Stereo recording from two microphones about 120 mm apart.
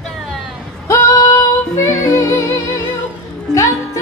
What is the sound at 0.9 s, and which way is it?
Music, 25° left (ahead or behind).